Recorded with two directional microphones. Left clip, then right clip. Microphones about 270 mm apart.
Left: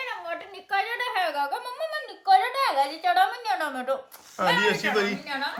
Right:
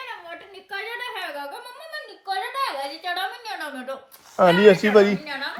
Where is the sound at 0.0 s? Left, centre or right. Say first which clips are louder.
Left 3 dB; centre.